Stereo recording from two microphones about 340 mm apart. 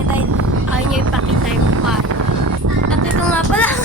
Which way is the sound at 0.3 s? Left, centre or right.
Right.